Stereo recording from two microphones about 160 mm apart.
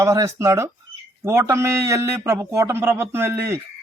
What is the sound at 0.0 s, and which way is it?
A man's voice, 20° right (ahead or behind).